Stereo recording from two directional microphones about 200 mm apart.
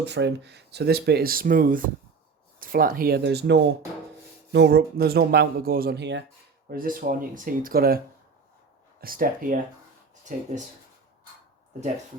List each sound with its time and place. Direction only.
0.0 s speech: 60° right (ahead or behind)
6.7 s speech: 45° right (ahead or behind)